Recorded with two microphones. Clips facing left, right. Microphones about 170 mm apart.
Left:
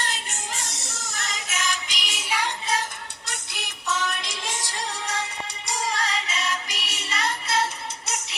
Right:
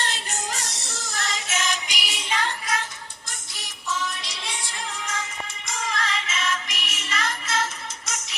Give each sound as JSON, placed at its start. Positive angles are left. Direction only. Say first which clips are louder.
{"t": 0.0, "sound": "music", "louder": "right 2 dB", "side_deg": -30}
{"t": 1.9, "sound": "music", "louder": "right 2 dB", "side_deg": -10}
{"t": 2.1, "sound": "music", "louder": "even", "side_deg": 10}
{"t": 3.2, "sound": "music", "louder": "left 4 dB", "side_deg": 65}